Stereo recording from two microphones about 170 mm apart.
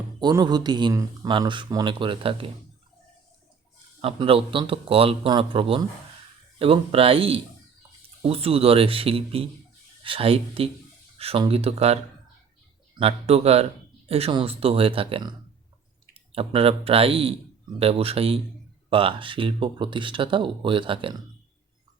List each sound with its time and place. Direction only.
0.2 s speech: 25° right (ahead or behind)
4.0 s speech: 35° right (ahead or behind)
13.0 s speech: 35° right (ahead or behind)